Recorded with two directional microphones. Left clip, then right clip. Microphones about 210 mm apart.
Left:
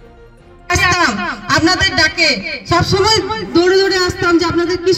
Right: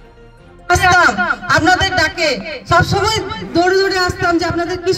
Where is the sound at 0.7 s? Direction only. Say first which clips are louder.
Right 2 dB; 30° right (ahead or behind).